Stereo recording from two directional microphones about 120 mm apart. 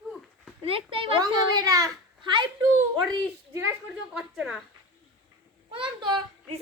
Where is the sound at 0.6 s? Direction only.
50° right (ahead or behind).